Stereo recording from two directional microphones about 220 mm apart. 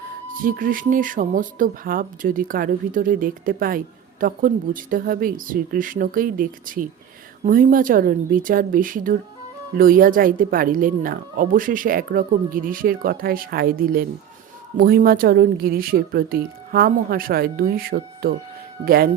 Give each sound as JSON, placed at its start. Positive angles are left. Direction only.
{"t": 0.3, "sound": "speech", "side_deg": -40}